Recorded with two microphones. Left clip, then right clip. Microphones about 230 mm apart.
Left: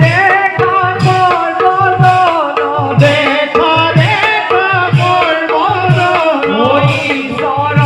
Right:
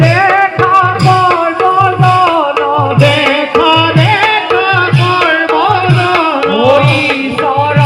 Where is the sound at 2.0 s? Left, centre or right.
Right.